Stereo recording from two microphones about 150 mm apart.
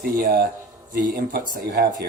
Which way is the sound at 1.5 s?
90° right.